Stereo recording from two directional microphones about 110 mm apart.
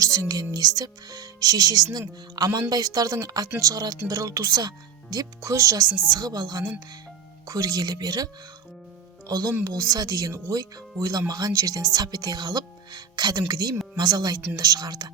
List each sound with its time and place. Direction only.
0.0 s speech: 30° right (ahead or behind)